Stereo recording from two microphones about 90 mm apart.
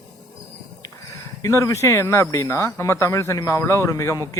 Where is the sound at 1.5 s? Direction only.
35° left (ahead or behind).